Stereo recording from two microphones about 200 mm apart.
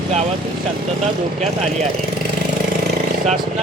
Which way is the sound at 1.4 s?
35° right (ahead or behind).